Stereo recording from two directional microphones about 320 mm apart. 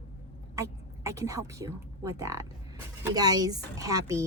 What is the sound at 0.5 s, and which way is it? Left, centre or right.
A woman's voice, centre.